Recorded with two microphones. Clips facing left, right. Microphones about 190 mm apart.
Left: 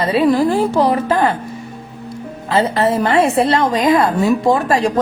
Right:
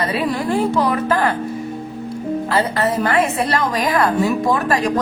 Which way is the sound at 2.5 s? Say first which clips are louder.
Left 5 dB; 25° left (ahead or behind).